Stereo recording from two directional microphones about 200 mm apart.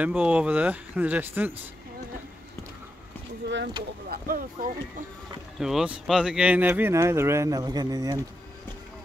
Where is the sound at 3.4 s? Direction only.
60° right (ahead or behind).